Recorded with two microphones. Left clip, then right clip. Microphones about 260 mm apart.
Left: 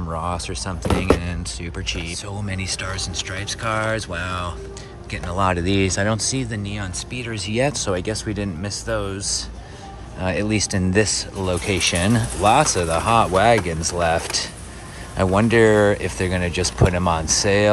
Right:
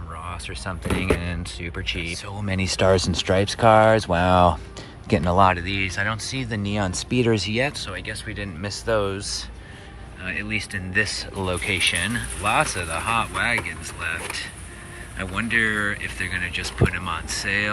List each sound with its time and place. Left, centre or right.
0.1 s speech: centre
6.4 s speech: centre
10.3 s speech: centre
16.0 s speech: centre